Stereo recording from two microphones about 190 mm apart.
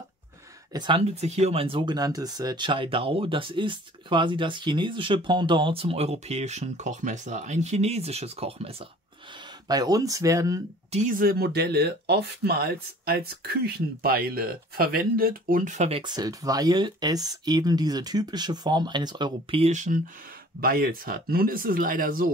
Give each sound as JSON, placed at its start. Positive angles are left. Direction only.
{"t": 0.7, "sound": "speech", "side_deg": -25}
{"t": 9.7, "sound": "speech", "side_deg": -20}
{"t": 10.9, "sound": "speech", "side_deg": -40}
{"t": 16.0, "sound": "speech", "side_deg": -20}
{"t": 20.6, "sound": "speech", "side_deg": -50}